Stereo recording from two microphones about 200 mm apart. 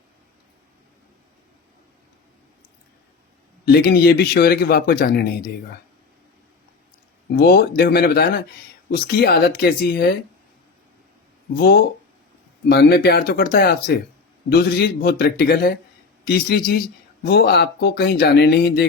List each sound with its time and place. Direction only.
3.7 s speech: 55° left (ahead or behind)
7.3 s speech: 55° left (ahead or behind)
12.6 s speech: 55° left (ahead or behind)